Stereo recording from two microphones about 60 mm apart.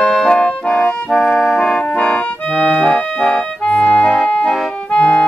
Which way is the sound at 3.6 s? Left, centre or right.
Centre.